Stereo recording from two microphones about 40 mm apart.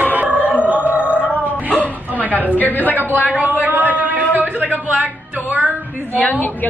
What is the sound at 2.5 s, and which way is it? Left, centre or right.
Speech, left.